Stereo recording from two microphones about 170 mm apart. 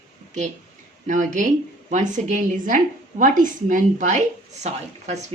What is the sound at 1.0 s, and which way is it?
Speech, 50° right (ahead or behind).